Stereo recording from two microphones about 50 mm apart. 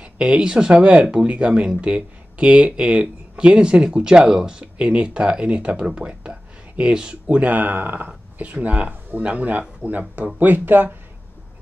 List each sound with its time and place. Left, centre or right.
0.0 s speech: centre; by 8.1 s right
8.4 s speech: right